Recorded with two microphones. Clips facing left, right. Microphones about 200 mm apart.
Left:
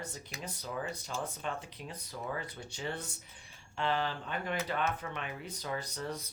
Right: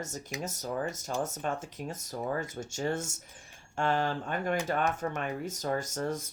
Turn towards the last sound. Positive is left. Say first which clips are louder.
# right 6 dB
turn(degrees=-45)  # may be behind; listen again after turning